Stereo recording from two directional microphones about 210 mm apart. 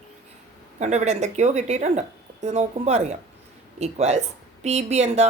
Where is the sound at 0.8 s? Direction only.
35° right (ahead or behind).